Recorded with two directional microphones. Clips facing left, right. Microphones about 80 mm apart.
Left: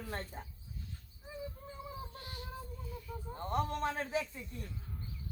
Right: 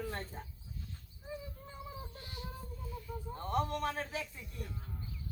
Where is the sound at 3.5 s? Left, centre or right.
Left.